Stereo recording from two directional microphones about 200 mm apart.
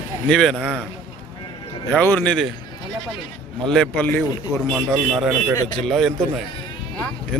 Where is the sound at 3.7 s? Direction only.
5° left (ahead or behind).